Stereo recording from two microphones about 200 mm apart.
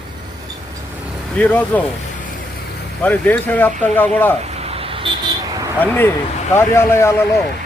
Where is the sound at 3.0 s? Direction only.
10° left (ahead or behind).